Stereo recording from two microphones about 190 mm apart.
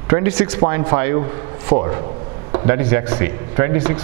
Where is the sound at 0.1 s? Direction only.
10° right (ahead or behind).